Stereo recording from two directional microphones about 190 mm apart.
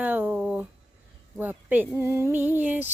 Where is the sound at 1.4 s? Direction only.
10° right (ahead or behind).